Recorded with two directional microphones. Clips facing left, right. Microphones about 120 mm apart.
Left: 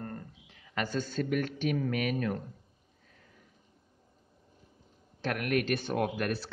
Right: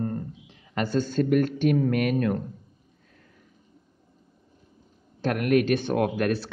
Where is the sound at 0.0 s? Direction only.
25° right (ahead or behind).